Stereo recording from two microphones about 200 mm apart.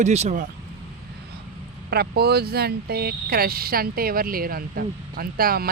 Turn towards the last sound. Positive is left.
turn(degrees=-50)  # may be behind; listen again after turning